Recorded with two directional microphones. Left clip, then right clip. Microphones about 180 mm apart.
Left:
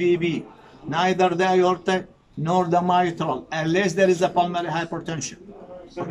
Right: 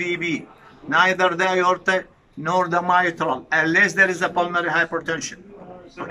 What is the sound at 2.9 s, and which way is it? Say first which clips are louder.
Speech: right 2 dB; 30° left (ahead or behind).